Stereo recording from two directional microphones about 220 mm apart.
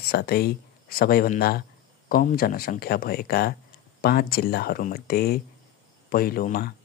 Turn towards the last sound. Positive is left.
turn(degrees=40)  # may be behind; listen again after turning